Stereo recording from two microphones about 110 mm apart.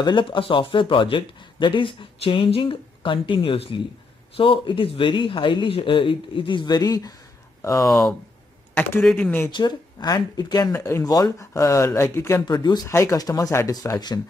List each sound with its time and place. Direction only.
0.0 s speech: 50° left (ahead or behind); by 7.9 s 30° left (ahead or behind)
7.9 s speech: 5° left (ahead or behind)
9.5 s speech: 40° left (ahead or behind); by 12.4 s 25° left (ahead or behind)
12.4 s speech: 40° left (ahead or behind)
12.8 s speech: 25° left (ahead or behind)